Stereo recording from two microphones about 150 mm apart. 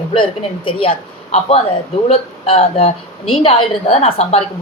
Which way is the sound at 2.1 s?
40° left (ahead or behind).